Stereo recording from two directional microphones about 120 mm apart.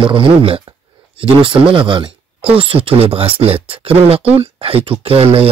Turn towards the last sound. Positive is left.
turn(degrees=-55)  # may be behind; listen again after turning